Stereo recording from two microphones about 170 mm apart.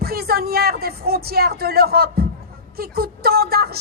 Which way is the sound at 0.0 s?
65° right (ahead or behind).